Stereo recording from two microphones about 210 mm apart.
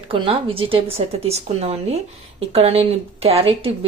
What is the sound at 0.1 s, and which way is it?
Speech, 25° right (ahead or behind).